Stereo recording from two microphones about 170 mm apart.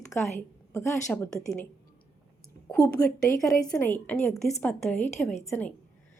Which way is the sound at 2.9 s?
20° left (ahead or behind).